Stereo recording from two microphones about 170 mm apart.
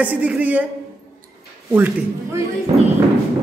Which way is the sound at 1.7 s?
15° right (ahead or behind).